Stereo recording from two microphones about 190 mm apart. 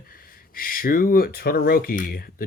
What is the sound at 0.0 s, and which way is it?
Speech, 50° left (ahead or behind).